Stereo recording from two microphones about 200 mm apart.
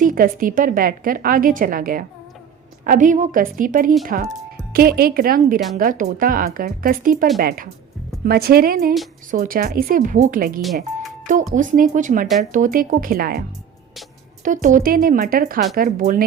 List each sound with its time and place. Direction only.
0.0 s a woman's voice: 45° right (ahead or behind)
14.4 s a woman's voice: 40° right (ahead or behind)